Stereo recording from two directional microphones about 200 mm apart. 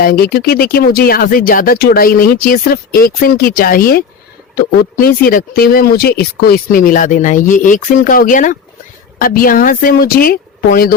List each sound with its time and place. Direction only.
0.0 s speech: 50° left (ahead or behind)